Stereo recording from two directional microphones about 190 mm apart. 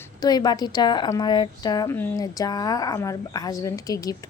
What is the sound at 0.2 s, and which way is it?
Speech, 20° left (ahead or behind).